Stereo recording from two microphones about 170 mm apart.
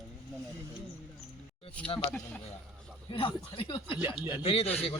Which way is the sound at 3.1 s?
30° left (ahead or behind).